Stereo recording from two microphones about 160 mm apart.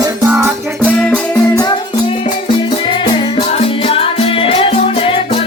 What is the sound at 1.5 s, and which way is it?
Music, 25° left (ahead or behind).